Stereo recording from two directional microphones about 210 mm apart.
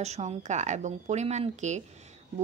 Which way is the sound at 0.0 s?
30° right (ahead or behind).